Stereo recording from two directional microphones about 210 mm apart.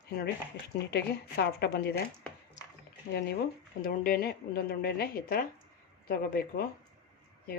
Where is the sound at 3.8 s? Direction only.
45° left (ahead or behind).